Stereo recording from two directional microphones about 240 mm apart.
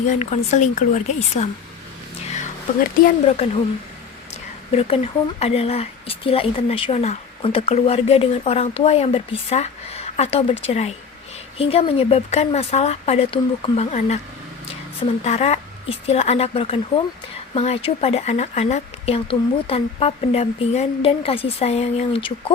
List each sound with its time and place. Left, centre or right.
0.1 s speech: left
3.0 s speech: left
4.3 s a sound: left
5.4 s speech: left
15.2 s speech: left